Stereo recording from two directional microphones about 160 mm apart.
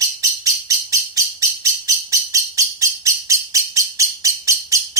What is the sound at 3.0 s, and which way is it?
Bird, 20° right (ahead or behind).